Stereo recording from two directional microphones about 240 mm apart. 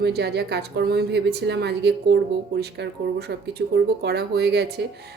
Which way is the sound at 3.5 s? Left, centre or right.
Right.